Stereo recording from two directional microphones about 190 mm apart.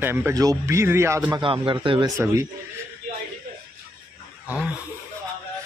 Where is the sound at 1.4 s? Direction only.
25° right (ahead or behind).